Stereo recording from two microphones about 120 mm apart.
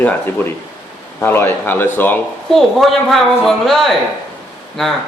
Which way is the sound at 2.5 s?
Centre (ahead or behind).